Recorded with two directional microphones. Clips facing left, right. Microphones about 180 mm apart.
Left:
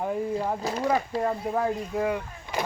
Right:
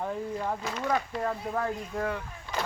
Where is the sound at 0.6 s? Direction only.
35° left (ahead or behind).